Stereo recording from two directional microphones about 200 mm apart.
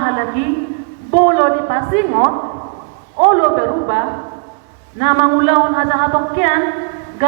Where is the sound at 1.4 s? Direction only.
50° right (ahead or behind).